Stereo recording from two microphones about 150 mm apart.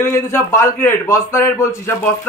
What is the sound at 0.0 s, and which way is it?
A man's voice, 15° left (ahead or behind).